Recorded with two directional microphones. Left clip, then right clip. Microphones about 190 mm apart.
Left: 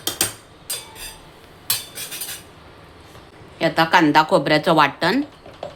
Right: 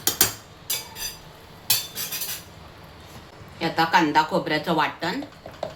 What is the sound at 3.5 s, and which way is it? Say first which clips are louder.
Speech: left 4 dB; 65° left (ahead or behind).